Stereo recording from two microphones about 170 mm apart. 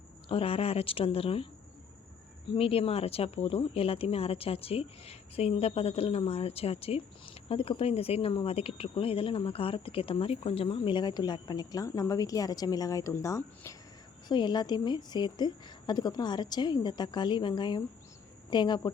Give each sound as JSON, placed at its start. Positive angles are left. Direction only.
{"t": 0.3, "sound": "speech", "side_deg": 35}
{"t": 2.5, "sound": "a woman's voice", "side_deg": 35}